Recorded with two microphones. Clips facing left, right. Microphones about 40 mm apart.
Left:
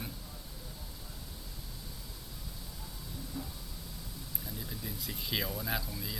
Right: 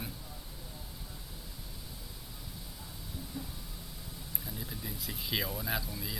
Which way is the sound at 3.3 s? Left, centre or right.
Centre.